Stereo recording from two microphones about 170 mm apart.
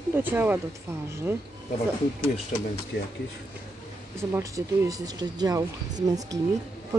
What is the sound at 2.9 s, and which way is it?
Speech, 65° left (ahead or behind).